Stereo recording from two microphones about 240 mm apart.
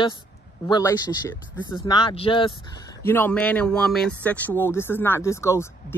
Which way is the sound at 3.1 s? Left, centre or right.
Centre.